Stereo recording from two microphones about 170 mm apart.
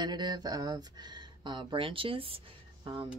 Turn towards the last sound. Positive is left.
turn(degrees=-30)  # may be behind; listen again after turning